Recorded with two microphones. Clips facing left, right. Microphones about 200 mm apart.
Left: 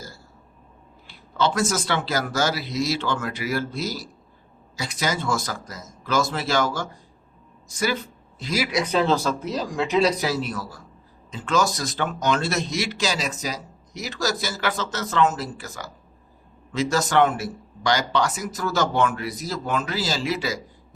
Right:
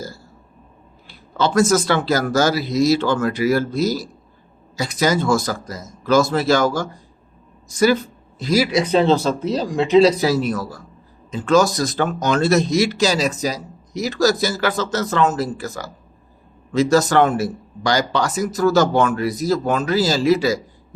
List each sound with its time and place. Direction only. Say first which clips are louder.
1.0 s speech: right 3 dB; 40° right (ahead or behind)
8.4 s speech: right 7 dB; 35° right (ahead or behind)